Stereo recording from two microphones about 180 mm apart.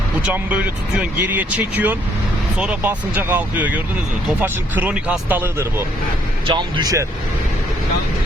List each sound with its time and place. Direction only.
0.3 s speech: 5° right (ahead or behind)
6.5 s speech: 25° right (ahead or behind)